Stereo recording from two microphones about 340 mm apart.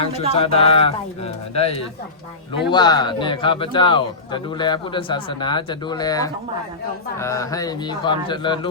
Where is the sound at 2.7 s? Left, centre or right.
Centre.